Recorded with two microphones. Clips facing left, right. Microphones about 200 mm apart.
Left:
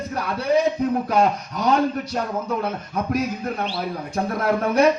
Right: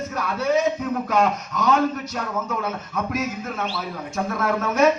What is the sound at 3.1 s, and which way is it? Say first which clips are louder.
A man's voice: left 5 dB; 35° left (ahead or behind).